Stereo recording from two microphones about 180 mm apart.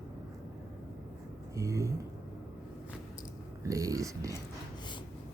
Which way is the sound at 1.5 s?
15° right (ahead or behind).